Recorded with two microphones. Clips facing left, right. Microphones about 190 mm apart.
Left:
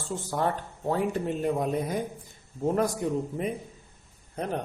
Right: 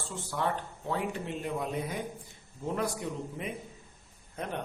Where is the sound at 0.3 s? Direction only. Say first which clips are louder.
Left 3 dB; 40° left (ahead or behind).